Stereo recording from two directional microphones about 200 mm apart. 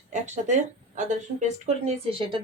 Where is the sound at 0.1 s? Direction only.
35° right (ahead or behind).